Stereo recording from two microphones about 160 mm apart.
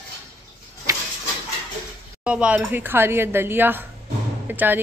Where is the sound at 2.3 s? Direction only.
5° right (ahead or behind).